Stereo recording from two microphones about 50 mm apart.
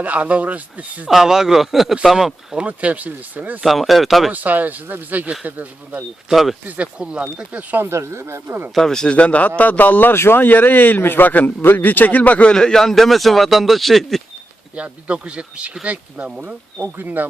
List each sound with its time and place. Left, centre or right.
0.0 s speech: right
1.0 s speech: centre
2.6 s speech: right
3.6 s speech: centre
4.3 s speech: right
6.3 s speech: centre
6.8 s speech: right
7.9 s speech: right
8.7 s speech: centre
9.0 s a man's voice: left
12.5 s speech: centre
14.8 s speech: right